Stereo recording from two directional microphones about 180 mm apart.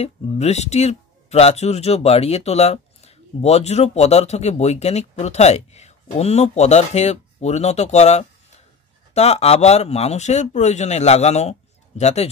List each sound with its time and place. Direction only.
0.0 s speech: 35° left (ahead or behind)